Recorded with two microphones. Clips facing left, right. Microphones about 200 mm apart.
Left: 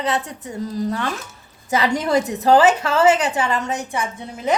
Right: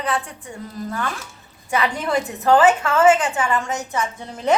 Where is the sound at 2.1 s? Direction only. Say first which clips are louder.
Left 2 dB; 25° left (ahead or behind).